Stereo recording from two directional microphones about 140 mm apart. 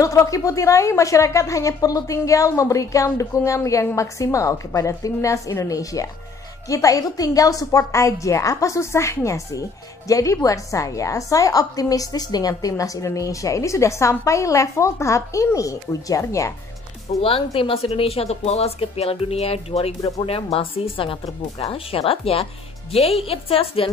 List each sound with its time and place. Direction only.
0.0 s a woman's voice: 25° left (ahead or behind)
17.1 s speech: 55° left (ahead or behind)
17.6 s speech: 40° left (ahead or behind)
20.0 s a woman's voice: 25° left (ahead or behind)
20.2 s speech: 45° left (ahead or behind)